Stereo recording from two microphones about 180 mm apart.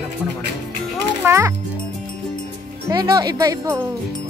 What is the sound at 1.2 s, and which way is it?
Music, 15° right (ahead or behind).